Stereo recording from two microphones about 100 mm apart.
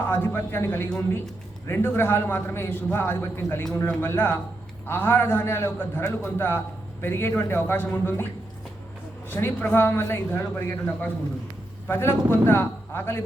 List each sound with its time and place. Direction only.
0.0 s a man's voice: 20° left (ahead or behind)
9.3 s a man's voice: 20° left (ahead or behind)